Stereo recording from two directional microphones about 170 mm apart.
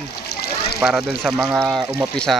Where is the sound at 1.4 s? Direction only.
10° right (ahead or behind).